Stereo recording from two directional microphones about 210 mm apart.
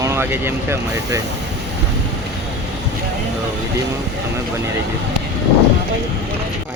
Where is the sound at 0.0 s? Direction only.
10° right (ahead or behind).